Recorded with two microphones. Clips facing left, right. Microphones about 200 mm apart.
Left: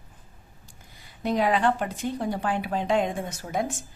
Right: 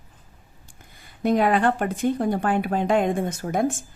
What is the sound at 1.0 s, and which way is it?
Speech, 50° right (ahead or behind).